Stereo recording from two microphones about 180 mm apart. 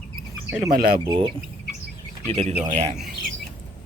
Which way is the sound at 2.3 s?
35° right (ahead or behind).